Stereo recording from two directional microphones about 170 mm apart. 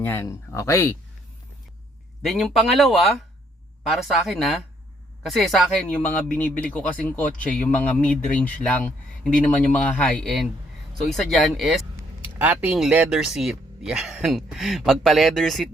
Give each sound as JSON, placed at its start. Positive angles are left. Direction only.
{"t": 0.0, "sound": "speech", "side_deg": 10}
{"t": 2.2, "sound": "speech", "side_deg": 0}